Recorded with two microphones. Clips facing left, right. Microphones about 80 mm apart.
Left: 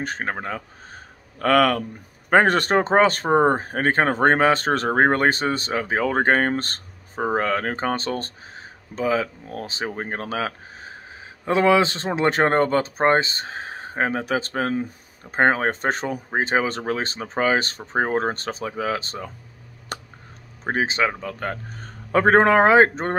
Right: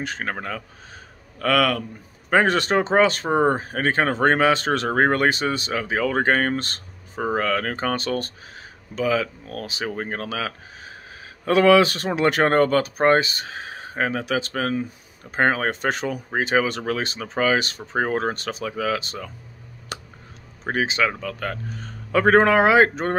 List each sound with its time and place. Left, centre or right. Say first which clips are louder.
0.0 s speech: left 1 dB; left
11.4 s speech: right 2 dB; left
19.9 s a sound: left 2 dB; left
20.6 s a man's voice: even; left